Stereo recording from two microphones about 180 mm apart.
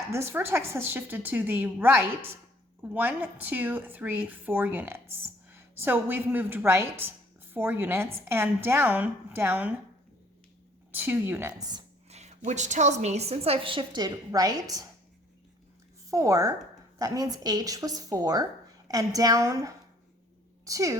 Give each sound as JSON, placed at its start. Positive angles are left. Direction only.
{"t": 0.1, "sound": "speech", "side_deg": -15}
{"t": 10.9, "sound": "speech", "side_deg": -10}
{"t": 12.0, "sound": "a woman's voice", "side_deg": -35}
{"t": 16.0, "sound": "a woman's voice", "side_deg": -15}